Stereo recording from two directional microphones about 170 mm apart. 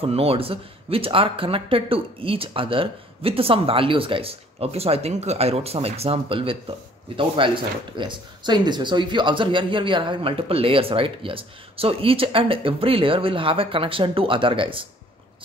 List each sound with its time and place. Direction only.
0.0 s speech: 35° right (ahead or behind)